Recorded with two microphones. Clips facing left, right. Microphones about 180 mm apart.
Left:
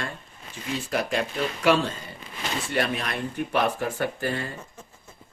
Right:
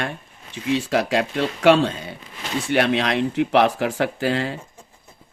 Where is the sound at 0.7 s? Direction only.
85° right.